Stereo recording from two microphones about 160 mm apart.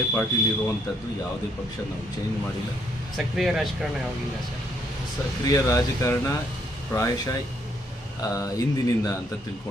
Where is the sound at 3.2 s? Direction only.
Centre (ahead or behind).